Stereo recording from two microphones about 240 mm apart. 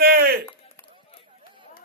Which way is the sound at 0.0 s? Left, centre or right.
Right.